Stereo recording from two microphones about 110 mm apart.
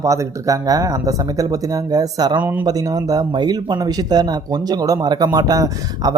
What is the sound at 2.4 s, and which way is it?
Speech, 15° right (ahead or behind).